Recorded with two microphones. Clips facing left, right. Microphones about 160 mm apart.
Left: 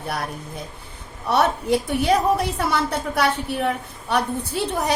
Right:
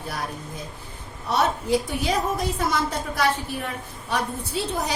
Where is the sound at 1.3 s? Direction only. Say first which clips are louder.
Left 3 dB; 65° left (ahead or behind).